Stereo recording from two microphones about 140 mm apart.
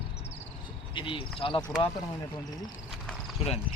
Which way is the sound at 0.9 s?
40° left (ahead or behind).